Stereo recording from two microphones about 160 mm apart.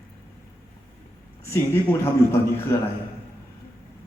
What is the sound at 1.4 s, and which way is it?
A man's voice, 15° left (ahead or behind).